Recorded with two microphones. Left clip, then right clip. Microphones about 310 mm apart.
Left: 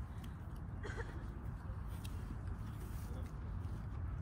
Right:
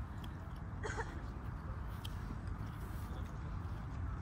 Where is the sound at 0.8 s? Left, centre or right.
Centre.